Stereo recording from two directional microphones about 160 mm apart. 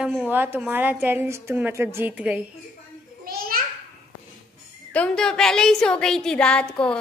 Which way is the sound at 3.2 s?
65° right (ahead or behind).